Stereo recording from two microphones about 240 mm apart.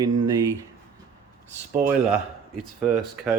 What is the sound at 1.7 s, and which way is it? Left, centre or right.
Speech, right.